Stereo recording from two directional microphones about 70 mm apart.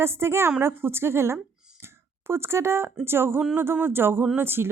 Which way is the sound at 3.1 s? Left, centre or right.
Right.